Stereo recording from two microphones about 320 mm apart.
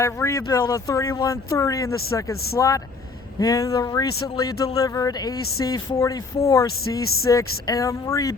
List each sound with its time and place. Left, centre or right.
0.0 s speech: centre